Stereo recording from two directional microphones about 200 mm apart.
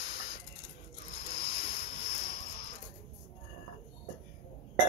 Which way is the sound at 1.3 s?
30° left (ahead or behind).